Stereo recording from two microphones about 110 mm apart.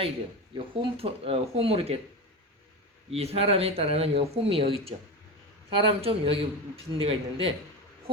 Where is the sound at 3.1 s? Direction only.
65° right (ahead or behind).